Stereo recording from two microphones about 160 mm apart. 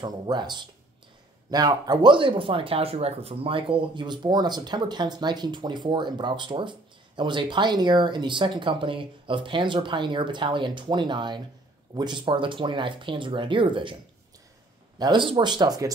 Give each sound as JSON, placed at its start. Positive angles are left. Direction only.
{"t": 0.0, "sound": "speech", "side_deg": -25}
{"t": 15.0, "sound": "speech", "side_deg": -30}